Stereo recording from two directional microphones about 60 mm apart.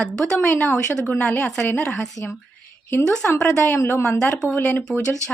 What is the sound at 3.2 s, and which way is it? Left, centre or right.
Speech, left.